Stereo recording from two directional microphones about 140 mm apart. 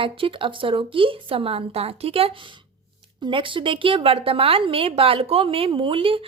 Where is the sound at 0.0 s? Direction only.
40° right (ahead or behind).